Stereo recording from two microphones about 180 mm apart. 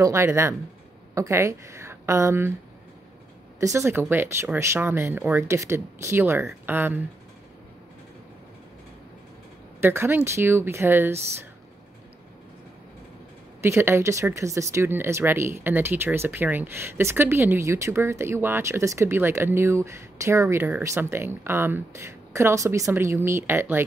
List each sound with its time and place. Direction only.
0.0 s a woman's voice: 15° right (ahead or behind)
3.5 s speech: 15° right (ahead or behind)
9.8 s speech: 10° right (ahead or behind)
13.6 s speech: 15° right (ahead or behind)